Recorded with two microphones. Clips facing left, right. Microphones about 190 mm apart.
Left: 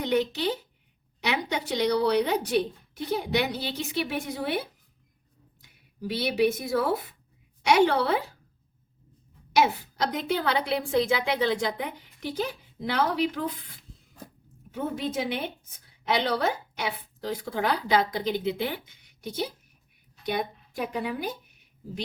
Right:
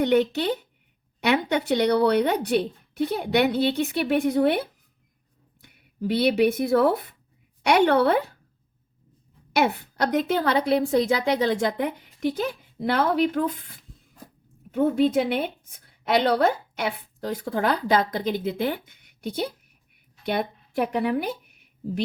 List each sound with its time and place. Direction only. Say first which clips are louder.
0.0 s speech: right 5 dB; 55° right (ahead or behind)
5.6 s speech: right 6 dB; 60° right (ahead or behind)
9.5 s a woman's voice: right 1 dB; 60° right (ahead or behind)
14.7 s a woman's voice: right 10 dB; 60° right (ahead or behind)